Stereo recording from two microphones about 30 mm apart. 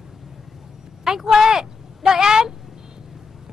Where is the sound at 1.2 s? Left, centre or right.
Centre.